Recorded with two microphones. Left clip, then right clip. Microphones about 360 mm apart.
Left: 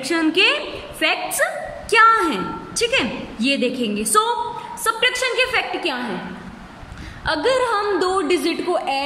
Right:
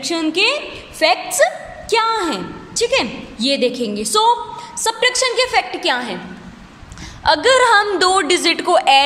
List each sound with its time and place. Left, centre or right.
0.0 s a woman's voice: centre
7.2 s a woman's voice: right